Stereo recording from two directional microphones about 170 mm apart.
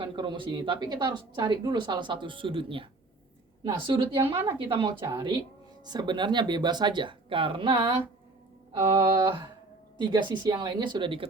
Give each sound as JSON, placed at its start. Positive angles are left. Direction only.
{"t": 0.0, "sound": "a woman's voice", "side_deg": -30}
{"t": 4.4, "sound": "a woman's voice", "side_deg": -15}
{"t": 4.8, "sound": "a woman's voice", "side_deg": -25}
{"t": 9.0, "sound": "a woman's voice", "side_deg": -30}